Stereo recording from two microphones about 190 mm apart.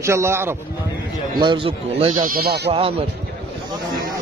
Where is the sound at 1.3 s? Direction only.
25° right (ahead or behind); by 2.7 s 60° right (ahead or behind).